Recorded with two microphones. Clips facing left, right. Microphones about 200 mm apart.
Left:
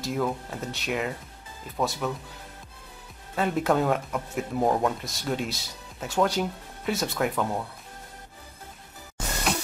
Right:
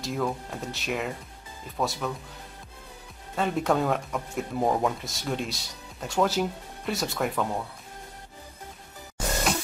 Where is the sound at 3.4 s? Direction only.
Centre (ahead or behind).